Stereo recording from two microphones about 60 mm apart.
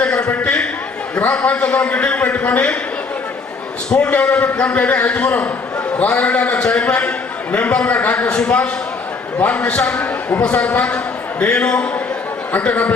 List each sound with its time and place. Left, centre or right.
0.0 s a sound: left
1.1 s a man's voice: left
3.8 s a man's voice: centre